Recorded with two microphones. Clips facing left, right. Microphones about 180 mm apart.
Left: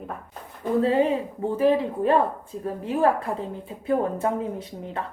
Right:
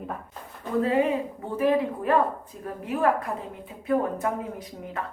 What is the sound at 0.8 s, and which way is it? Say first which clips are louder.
A woman's voice: left 1 dB; 30° left (ahead or behind).